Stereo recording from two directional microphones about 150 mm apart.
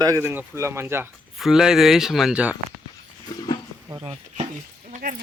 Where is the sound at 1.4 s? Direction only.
Centre (ahead or behind).